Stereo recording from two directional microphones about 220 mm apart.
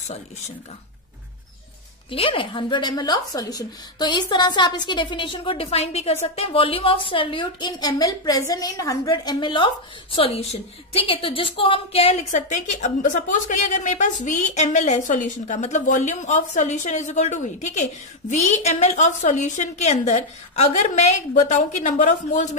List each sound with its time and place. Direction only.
2.0 s a woman's voice: 25° left (ahead or behind)